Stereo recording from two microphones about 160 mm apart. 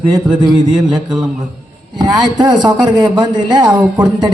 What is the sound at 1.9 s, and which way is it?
Speech, 25° right (ahead or behind).